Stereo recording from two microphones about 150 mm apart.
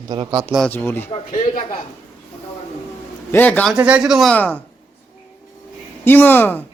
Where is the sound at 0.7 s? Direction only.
15° left (ahead or behind).